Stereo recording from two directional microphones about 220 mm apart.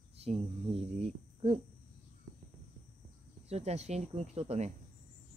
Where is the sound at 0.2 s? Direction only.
25° right (ahead or behind).